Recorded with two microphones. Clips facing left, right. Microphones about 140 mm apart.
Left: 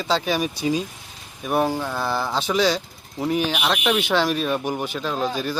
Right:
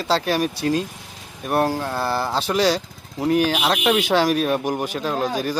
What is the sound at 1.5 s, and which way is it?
Speech, 5° right (ahead or behind).